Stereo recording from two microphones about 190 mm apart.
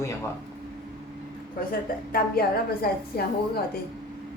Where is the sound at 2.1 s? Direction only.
55° left (ahead or behind).